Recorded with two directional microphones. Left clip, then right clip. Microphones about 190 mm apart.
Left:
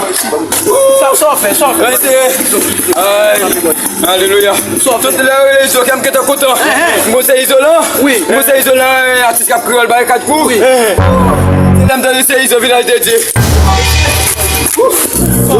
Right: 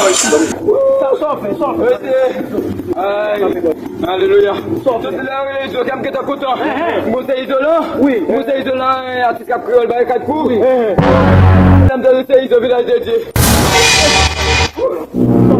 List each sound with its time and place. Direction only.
3.1 s a man's voice: 30° left (ahead or behind)
7.3 s a man's voice: 15° left (ahead or behind)
12.1 s a man's voice: 20° left (ahead or behind)